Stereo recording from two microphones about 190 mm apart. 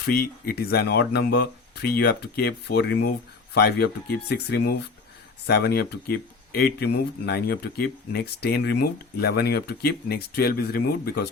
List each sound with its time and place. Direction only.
0.0 s speech: 50° left (ahead or behind)